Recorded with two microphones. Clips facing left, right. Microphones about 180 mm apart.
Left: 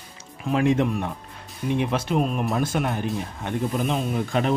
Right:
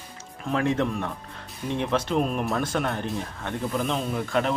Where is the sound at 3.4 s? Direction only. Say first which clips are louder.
Left 3 dB; 15° left (ahead or behind).